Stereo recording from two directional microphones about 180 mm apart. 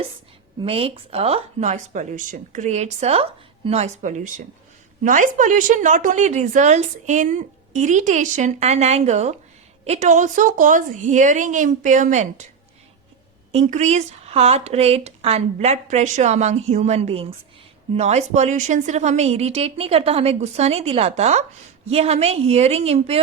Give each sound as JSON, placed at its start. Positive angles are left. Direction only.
{"t": 0.6, "sound": "a woman's voice", "side_deg": -30}
{"t": 13.5, "sound": "speech", "side_deg": -40}